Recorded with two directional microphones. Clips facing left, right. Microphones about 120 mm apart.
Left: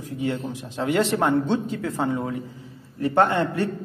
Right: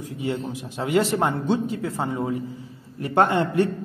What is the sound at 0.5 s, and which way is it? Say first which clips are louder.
Speech: even; 10° right (ahead or behind).